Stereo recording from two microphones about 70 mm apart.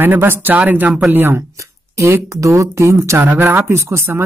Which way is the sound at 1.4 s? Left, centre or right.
Right.